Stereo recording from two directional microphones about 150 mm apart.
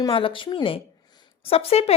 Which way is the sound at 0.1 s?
35° left (ahead or behind).